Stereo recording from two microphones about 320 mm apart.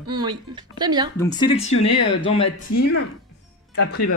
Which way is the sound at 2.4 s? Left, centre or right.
Left.